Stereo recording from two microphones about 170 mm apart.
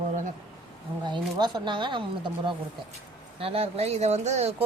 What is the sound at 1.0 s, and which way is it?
Speech, 25° right (ahead or behind).